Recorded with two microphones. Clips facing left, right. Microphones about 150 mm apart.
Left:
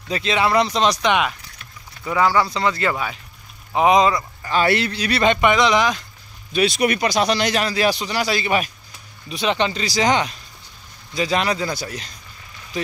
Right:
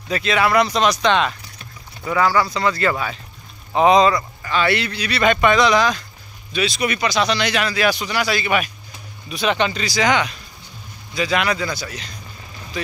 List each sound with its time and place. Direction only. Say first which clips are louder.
0.1 s speech: right 1 dB; 25° left (ahead or behind)
2.1 s speech: even; 20° left (ahead or behind)
4.5 s speech: left 1 dB; 40° left (ahead or behind)
5.2 s speech: right 1 dB; 20° left (ahead or behind)
6.5 s speech: left 3 dB; 55° left (ahead or behind); by 11.7 s 35° left (ahead or behind)
11.7 s speech: left 1 dB; 45° left (ahead or behind)